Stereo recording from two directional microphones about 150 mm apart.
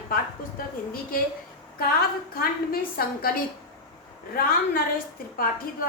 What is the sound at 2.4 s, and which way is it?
A woman's voice, 80° left.